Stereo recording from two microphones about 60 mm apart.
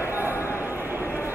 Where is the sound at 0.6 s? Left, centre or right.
Right.